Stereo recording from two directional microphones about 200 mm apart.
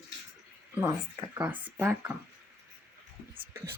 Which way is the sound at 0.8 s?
15° right (ahead or behind).